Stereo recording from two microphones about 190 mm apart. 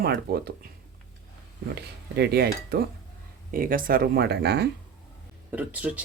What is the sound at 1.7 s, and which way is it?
Speech, 60° right (ahead or behind).